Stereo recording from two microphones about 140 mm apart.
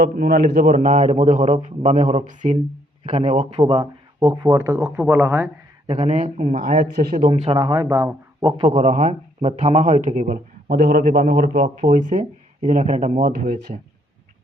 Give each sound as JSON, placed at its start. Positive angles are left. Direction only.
{"t": 0.0, "sound": "a man's voice", "side_deg": -80}
{"t": 3.6, "sound": "speech", "side_deg": -35}
{"t": 5.9, "sound": "speech", "side_deg": -55}
{"t": 6.6, "sound": "a man's voice", "side_deg": -80}
{"t": 7.5, "sound": "speech", "side_deg": -30}
{"t": 8.4, "sound": "speech", "side_deg": -40}
{"t": 8.7, "sound": "a man's voice", "side_deg": -55}
{"t": 9.4, "sound": "speech", "side_deg": -40}
{"t": 9.6, "sound": "a man's voice", "side_deg": -60}
{"t": 11.1, "sound": "a man's voice", "side_deg": -60}